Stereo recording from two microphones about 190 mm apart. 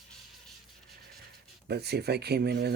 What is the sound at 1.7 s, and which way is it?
Speech, 60° right (ahead or behind).